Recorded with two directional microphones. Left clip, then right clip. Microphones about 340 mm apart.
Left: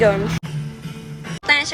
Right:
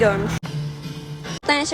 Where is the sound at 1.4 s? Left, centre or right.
Centre.